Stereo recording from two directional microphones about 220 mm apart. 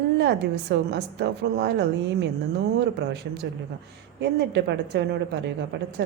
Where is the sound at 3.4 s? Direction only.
50° right (ahead or behind).